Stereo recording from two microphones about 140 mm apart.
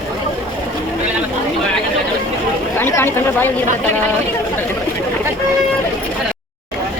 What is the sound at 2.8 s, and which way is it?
Speech, 15° left (ahead or behind).